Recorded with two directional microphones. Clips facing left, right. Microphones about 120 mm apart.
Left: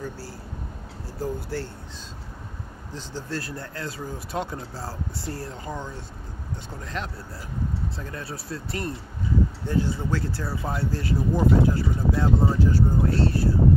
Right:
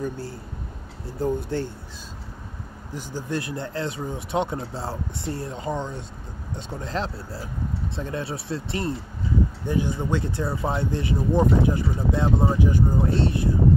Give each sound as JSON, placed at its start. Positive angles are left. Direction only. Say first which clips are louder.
{"t": 1.2, "sound": "speech", "louder": "right 5 dB", "side_deg": -20}
{"t": 2.9, "sound": "speech", "louder": "right 4 dB", "side_deg": -15}